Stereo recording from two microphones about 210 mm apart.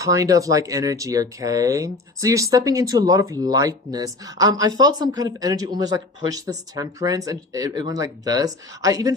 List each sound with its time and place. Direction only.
0.0 s speech: 15° right (ahead or behind)